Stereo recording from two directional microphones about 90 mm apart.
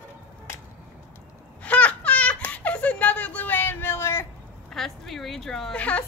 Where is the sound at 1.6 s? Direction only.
15° left (ahead or behind).